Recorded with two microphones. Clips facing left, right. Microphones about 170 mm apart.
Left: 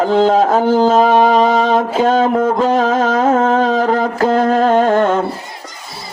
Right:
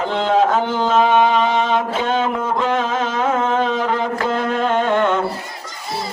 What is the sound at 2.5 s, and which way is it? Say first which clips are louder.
Music: left 6 dB; 40° left (ahead or behind).